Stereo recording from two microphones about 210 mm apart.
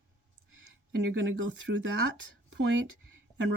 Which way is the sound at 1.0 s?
65° right (ahead or behind).